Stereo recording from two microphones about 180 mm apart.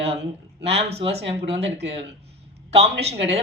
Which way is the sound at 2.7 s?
35° right (ahead or behind).